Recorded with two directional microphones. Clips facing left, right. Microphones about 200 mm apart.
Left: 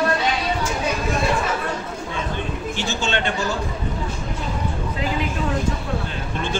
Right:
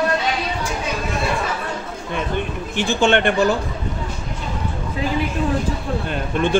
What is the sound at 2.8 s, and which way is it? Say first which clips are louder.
Speech: right 9 dB; 55° right (ahead or behind).